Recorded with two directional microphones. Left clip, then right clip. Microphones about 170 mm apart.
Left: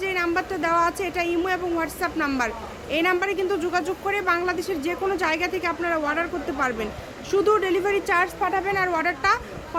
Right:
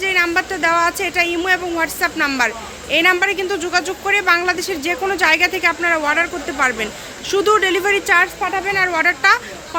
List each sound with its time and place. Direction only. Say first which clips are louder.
0.0 s speech: right 8 dB; centre (ahead or behind)